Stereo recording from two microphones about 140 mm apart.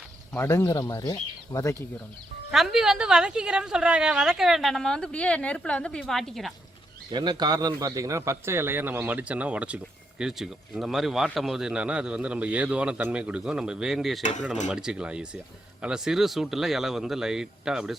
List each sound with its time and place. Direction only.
0.3 s speech: 15° left (ahead or behind)
0.7 s speech: 30° left (ahead or behind)
2.5 s a woman's voice: centre (ahead or behind)
7.1 s speech: 30° right (ahead or behind); by 14.2 s centre (ahead or behind)
14.2 s speech: 60° left (ahead or behind)
14.7 s a woman's voice: 5° right (ahead or behind)